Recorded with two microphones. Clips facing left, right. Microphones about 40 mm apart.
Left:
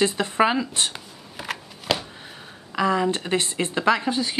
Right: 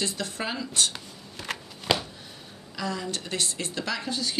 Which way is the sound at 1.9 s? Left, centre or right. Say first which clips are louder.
Left 1 dB; centre.